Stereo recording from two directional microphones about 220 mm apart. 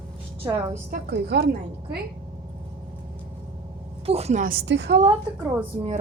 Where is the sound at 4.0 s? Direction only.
30° right (ahead or behind); by 4.9 s 50° right (ahead or behind).